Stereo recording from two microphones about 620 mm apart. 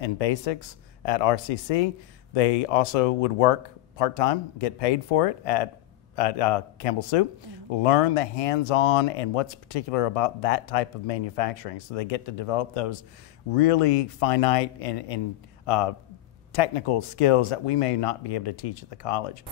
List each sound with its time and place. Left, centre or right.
0.0 s speech: left